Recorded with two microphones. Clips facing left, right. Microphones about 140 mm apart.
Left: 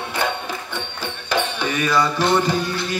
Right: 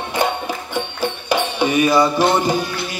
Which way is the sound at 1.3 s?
15° right (ahead or behind).